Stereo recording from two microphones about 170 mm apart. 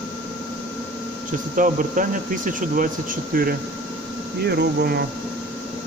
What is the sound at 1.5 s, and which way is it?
Speech, 50° right (ahead or behind).